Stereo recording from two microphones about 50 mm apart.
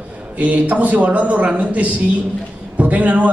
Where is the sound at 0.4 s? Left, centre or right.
Right.